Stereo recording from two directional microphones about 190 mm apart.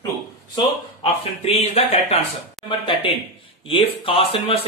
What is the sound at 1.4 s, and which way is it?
Speech, 30° left (ahead or behind).